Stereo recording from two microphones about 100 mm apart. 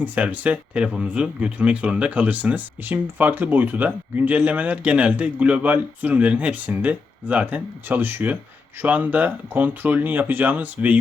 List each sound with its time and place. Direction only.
0.0 s speech: 15° right (ahead or behind)